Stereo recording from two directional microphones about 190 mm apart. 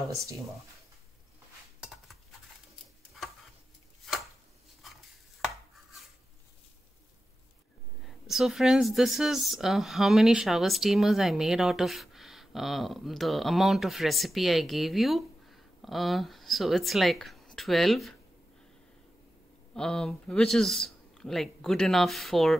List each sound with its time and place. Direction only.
4.0 s chopping: centre (ahead or behind)
8.3 s speech: centre (ahead or behind)
19.7 s speech: 5° left (ahead or behind)